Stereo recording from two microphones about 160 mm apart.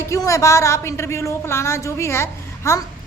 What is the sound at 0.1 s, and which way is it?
A woman's voice, 20° left (ahead or behind).